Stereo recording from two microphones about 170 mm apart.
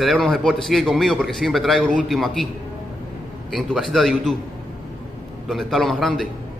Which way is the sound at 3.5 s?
Centre (ahead or behind).